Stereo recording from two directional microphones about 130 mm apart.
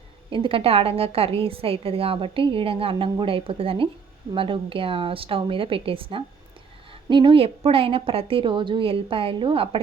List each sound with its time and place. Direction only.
0.3 s a woman's voice: 40° right (ahead or behind)